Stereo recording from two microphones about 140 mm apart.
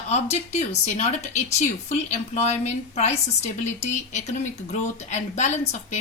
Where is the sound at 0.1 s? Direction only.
50° left (ahead or behind).